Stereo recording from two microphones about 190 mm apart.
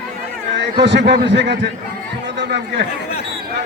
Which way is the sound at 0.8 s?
65° right (ahead or behind).